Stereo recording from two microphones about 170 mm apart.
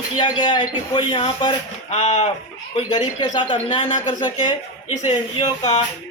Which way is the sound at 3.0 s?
25° left (ahead or behind).